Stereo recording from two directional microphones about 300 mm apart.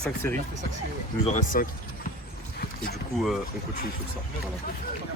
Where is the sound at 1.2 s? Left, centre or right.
Left.